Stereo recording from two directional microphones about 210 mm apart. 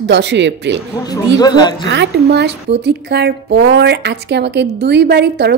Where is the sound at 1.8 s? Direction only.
55° right (ahead or behind).